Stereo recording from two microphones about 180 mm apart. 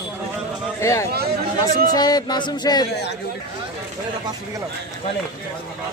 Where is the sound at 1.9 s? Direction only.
20° left (ahead or behind).